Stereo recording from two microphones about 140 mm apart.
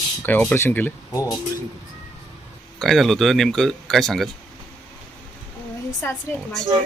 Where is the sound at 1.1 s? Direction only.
25° left (ahead or behind).